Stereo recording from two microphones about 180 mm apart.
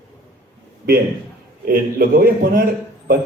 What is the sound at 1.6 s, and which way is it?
A man's voice, 50° right (ahead or behind).